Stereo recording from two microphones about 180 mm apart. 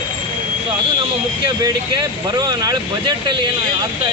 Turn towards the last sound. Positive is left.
turn(degrees=-25)  # may be behind; listen again after turning